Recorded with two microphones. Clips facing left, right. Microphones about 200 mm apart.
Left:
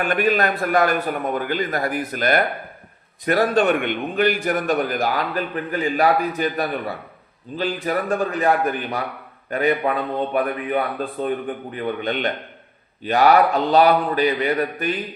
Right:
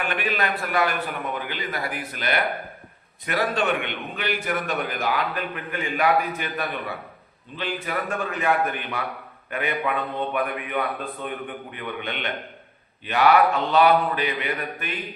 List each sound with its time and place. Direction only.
0.0 s a man's voice: 45° left (ahead or behind)